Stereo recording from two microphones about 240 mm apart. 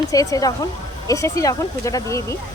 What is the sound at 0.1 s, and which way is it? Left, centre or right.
Speech, centre.